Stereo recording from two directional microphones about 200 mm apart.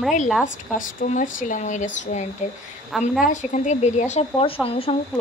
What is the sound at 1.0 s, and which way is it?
Speech, 40° left (ahead or behind).